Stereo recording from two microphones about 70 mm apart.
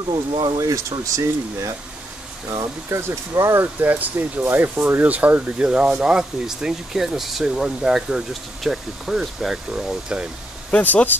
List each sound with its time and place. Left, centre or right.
0.0 s speech: right
0.6 s speech: right
2.5 s speech: right
3.0 s speech: right
5.0 s speech: right
10.7 s speech: left